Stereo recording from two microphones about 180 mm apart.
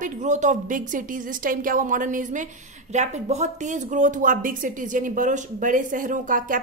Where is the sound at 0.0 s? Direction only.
40° right (ahead or behind).